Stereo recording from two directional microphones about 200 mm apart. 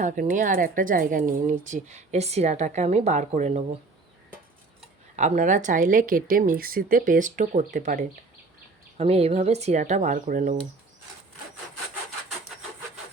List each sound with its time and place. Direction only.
0.0 s speech: 40° right (ahead or behind)
4.8 s speech: 35° right (ahead or behind)
9.0 s speech: 30° right (ahead or behind)